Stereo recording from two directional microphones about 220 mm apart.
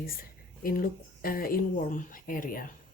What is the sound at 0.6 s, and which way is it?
Speech, 40° left (ahead or behind).